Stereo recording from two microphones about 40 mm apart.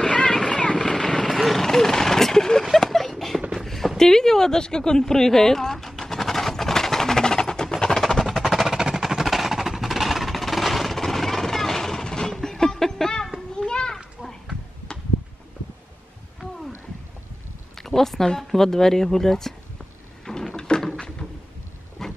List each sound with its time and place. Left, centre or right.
0.0 s vehicle: centre
2.6 s a sound: centre
12.0 s music: centre
13.6 s children playing: centre
16.3 s a sound: centre
17.7 s speech: centre
20.2 s drawer open or close: centre
22.0 s steam: centre